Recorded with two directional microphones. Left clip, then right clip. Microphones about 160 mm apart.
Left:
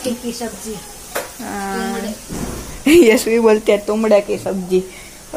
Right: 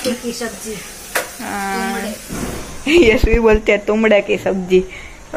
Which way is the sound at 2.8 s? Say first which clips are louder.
Left 1 dB; 45° left (ahead or behind).